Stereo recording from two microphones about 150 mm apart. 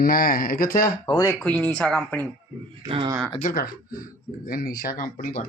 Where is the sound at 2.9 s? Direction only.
40° right (ahead or behind).